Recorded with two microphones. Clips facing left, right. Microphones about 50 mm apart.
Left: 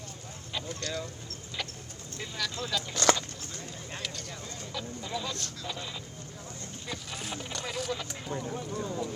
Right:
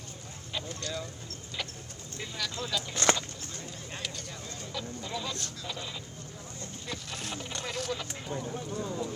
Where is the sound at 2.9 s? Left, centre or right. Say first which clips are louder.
Left 2 dB; right.